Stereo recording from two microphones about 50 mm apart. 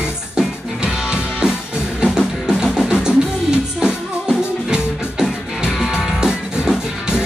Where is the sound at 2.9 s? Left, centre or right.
Centre.